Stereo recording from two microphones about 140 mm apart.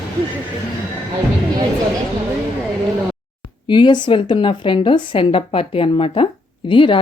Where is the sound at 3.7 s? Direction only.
35° left (ahead or behind).